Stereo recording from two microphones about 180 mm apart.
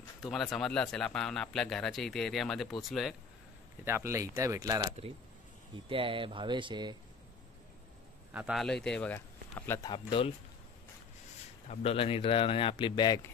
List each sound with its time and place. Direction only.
0.2 s speech: centre (ahead or behind)
3.8 s speech: 15° right (ahead or behind)
8.3 s a man's voice: 5° right (ahead or behind); by 9.8 s 10° left (ahead or behind)
9.8 s speech: 25° left (ahead or behind)
11.7 s speech: 35° left (ahead or behind)